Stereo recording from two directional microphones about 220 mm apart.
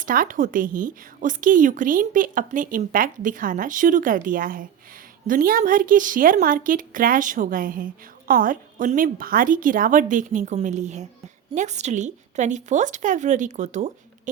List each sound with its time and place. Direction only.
0.0 s a woman's voice: 40° right (ahead or behind)